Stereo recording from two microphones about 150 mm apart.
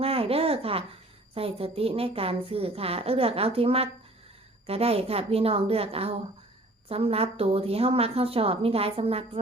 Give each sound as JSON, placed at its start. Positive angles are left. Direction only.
{"t": 0.0, "sound": "a woman's voice", "side_deg": -40}